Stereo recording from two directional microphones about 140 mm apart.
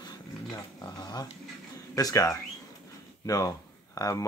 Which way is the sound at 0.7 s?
30° left (ahead or behind).